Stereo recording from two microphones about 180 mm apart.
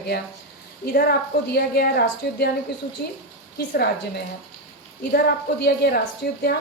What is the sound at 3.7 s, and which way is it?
Speech, 65° left (ahead or behind).